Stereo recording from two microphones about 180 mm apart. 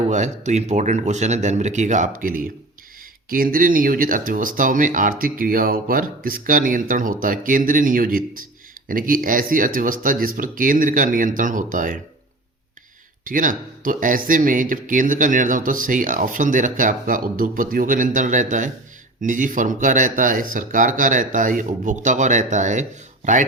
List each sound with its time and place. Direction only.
0.1 s speech: 40° right (ahead or behind)
13.2 s speech: 50° right (ahead or behind)